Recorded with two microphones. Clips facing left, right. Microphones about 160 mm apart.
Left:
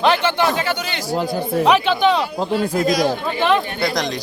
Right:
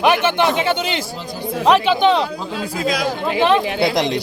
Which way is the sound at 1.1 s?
55° left (ahead or behind).